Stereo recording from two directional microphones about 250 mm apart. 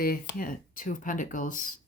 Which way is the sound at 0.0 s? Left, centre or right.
Left.